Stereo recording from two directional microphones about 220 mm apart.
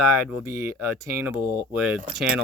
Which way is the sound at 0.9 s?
15° right (ahead or behind).